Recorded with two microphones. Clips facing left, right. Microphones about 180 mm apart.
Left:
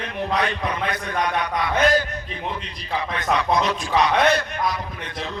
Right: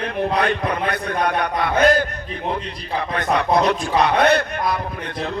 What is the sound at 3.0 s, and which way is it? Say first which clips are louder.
A man's voice: right 3 dB; 55° right (ahead or behind).